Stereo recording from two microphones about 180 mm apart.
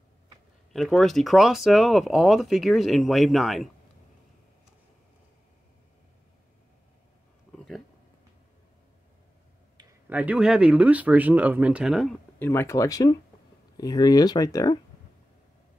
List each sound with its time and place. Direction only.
0.7 s speech: centre (ahead or behind)
7.5 s a sound: centre (ahead or behind)
10.0 s speech: 10° right (ahead or behind)
12.4 s speech: 15° left (ahead or behind)